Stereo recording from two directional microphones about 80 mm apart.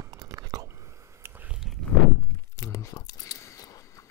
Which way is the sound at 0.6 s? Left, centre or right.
Right.